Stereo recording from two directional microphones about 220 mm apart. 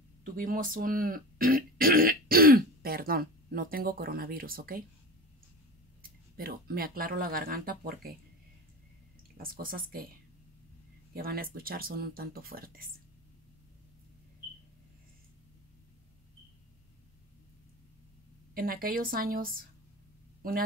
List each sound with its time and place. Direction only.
0.4 s speech: 40° right (ahead or behind)
6.3 s speech: 45° right (ahead or behind)
9.4 s speech: 40° right (ahead or behind)
11.1 s speech: 40° right (ahead or behind)
18.5 s speech: 40° right (ahead or behind)